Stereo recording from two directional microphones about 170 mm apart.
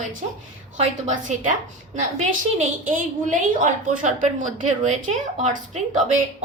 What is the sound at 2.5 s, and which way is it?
A woman's voice, 50° right (ahead or behind).